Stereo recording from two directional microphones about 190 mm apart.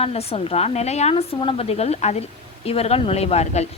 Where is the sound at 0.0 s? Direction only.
30° left (ahead or behind).